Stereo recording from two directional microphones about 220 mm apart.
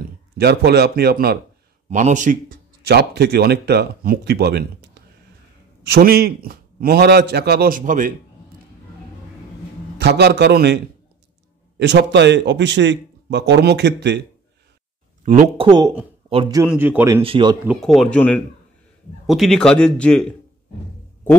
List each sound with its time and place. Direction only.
0.4 s speech: 50° right (ahead or behind)
1.9 s speech: 35° right (ahead or behind)
9.9 s speech: 50° right (ahead or behind)
11.8 s speech: 50° right (ahead or behind)
15.2 s speech: 35° right (ahead or behind)
15.6 s a man's voice: 20° right (ahead or behind)
16.6 s a man's voice: 10° right (ahead or behind)
17.2 s speech: 25° right (ahead or behind)
17.6 s speech: centre (ahead or behind)